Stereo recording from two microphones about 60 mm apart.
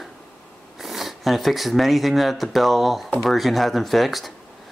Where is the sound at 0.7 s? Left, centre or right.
Centre.